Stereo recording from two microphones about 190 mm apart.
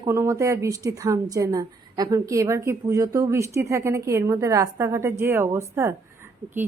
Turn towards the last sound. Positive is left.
turn(degrees=-10)  # may be behind; listen again after turning